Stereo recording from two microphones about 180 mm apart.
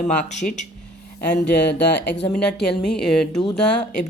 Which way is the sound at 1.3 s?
70° left (ahead or behind).